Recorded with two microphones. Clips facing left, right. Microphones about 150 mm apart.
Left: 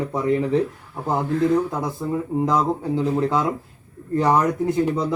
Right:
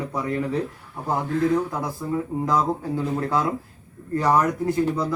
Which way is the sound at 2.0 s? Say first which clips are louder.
Left 4 dB; 20° left (ahead or behind).